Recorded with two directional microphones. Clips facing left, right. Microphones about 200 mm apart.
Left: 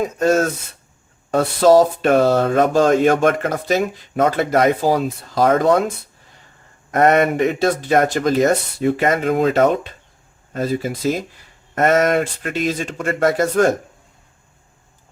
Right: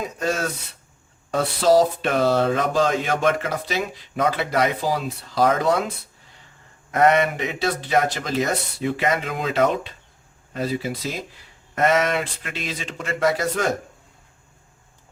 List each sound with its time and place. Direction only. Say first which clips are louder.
0.0 s speech: left 8 dB; 45° left (ahead or behind)
6.9 s speech: left 4 dB; 45° left (ahead or behind)